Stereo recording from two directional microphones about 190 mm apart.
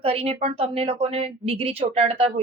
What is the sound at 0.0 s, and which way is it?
A woman's voice, 30° right (ahead or behind).